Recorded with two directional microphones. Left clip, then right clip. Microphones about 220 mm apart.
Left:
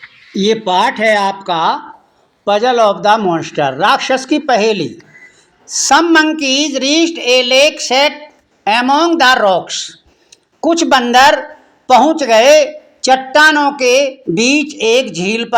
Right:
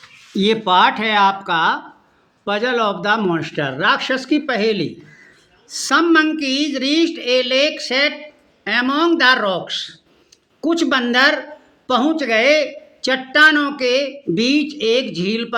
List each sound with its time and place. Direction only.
0.3 s a man's voice: centre (ahead or behind)